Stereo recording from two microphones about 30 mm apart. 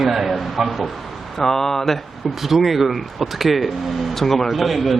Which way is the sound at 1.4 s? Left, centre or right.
Centre.